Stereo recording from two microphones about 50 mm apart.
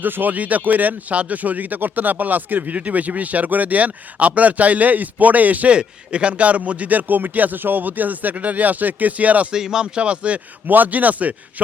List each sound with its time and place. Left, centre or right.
0.0 s speech: right
5.7 s speech: right
9.5 s speech: centre
10.7 s speech: right